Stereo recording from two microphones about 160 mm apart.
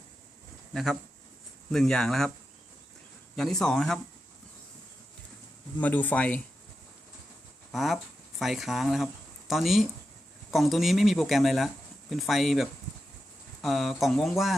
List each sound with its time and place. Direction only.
0.7 s speech: centre (ahead or behind)
3.3 s speech: 5° left (ahead or behind)
5.8 s speech: 10° left (ahead or behind)
7.7 s speech: centre (ahead or behind)